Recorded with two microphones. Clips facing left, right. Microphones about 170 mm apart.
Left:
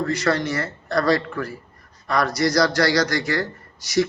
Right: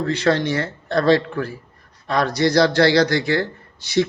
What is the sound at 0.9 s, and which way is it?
Speech, 25° right (ahead or behind).